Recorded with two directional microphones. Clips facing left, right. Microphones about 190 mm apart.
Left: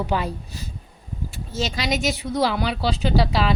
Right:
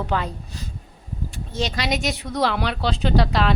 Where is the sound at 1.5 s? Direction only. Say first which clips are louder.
Even; centre (ahead or behind).